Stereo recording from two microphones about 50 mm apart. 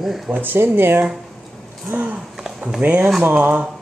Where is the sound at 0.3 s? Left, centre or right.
Right.